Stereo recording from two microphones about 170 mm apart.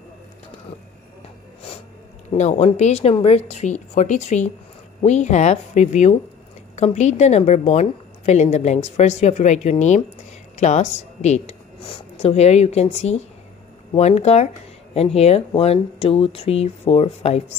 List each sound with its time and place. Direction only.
2.3 s a woman's voice: 40° left (ahead or behind)